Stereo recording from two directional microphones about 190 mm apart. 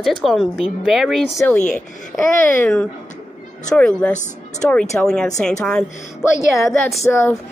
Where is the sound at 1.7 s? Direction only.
5° left (ahead or behind).